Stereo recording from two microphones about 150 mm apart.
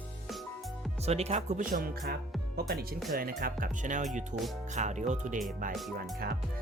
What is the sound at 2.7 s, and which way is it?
Speech, 90° right.